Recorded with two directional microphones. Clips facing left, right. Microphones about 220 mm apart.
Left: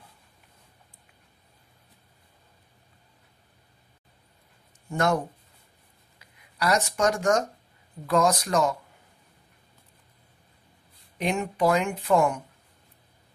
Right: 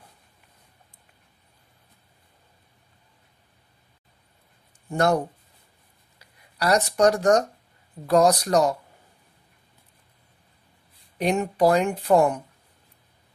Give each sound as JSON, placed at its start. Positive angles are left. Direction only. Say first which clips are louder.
{"t": 4.8, "sound": "speech", "louder": "right 3 dB", "side_deg": -35}
{"t": 11.1, "sound": "speech", "louder": "right 4 dB", "side_deg": -40}